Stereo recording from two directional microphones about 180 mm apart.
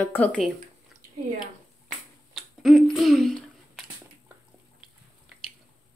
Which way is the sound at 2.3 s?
Centre (ahead or behind).